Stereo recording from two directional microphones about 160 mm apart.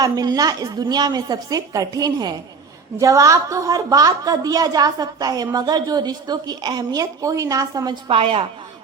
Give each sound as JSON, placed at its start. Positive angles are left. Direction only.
{"t": 0.0, "sound": "a woman's voice", "side_deg": -25}